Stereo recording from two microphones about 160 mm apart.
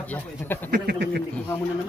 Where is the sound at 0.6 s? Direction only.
70° right (ahead or behind).